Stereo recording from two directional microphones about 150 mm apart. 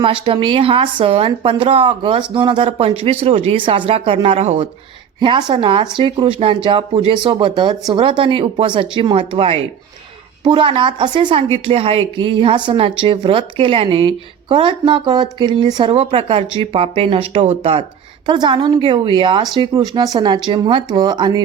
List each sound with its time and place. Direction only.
0.0 s speech: 35° right (ahead or behind)